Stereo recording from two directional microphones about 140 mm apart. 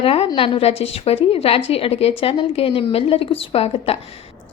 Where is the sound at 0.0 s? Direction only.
40° left (ahead or behind).